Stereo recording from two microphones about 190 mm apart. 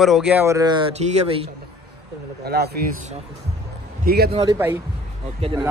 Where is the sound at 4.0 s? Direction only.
55° right (ahead or behind).